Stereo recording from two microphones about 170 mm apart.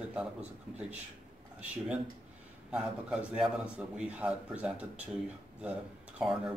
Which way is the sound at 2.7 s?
5° right (ahead or behind).